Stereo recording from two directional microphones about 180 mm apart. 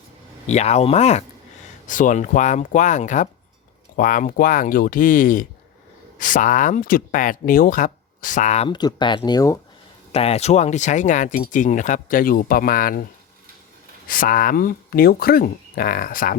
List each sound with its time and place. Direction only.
0.4 s speech: 40° left (ahead or behind); by 9.6 s 20° left (ahead or behind)
10.1 s speech: 35° left (ahead or behind); by 13.1 s 55° left (ahead or behind)
14.1 s speech: 55° left (ahead or behind)